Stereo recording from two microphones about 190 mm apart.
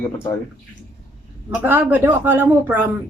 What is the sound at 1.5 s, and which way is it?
A woman's voice, 10° right (ahead or behind).